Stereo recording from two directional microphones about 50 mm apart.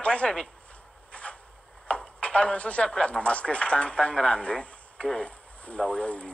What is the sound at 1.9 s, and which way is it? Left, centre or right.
A woman's voice, left.